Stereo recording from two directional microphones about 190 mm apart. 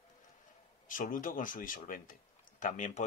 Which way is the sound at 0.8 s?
45° left (ahead or behind).